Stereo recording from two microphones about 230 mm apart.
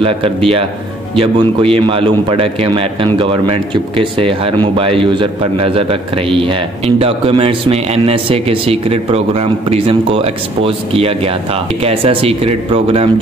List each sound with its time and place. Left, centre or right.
0.0 s a man's voice: right